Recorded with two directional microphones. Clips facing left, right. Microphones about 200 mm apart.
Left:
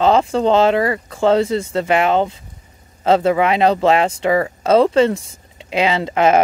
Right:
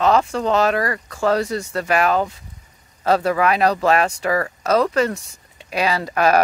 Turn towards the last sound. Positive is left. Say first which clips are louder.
# left 3 dB
turn(degrees=20)  # may be behind; listen again after turning